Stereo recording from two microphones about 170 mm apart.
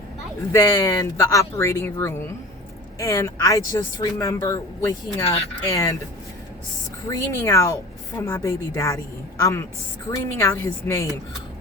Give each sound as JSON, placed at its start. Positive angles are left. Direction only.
{"t": 0.5, "sound": "a woman's voice", "side_deg": 20}
{"t": 7.1, "sound": "a woman's voice", "side_deg": 20}